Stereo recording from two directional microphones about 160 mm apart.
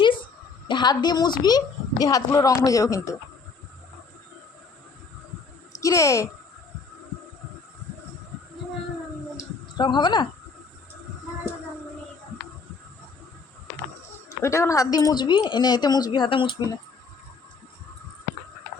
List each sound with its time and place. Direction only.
0.7 s a woman's voice: 25° left (ahead or behind)
5.7 s speech: 20° left (ahead or behind)
9.7 s a woman's voice: 30° left (ahead or behind)
14.3 s a woman's voice: 15° left (ahead or behind)